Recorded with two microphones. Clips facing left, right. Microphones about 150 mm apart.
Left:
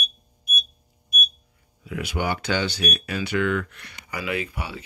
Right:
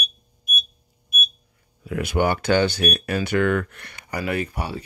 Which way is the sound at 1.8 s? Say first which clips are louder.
Right 6 dB; 50° right (ahead or behind).